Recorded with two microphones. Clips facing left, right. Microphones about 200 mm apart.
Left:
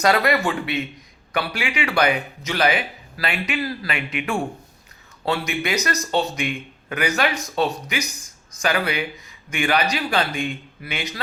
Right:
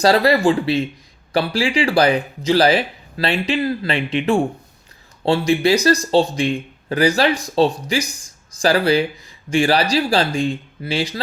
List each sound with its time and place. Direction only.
0.0 s speech: 30° right (ahead or behind)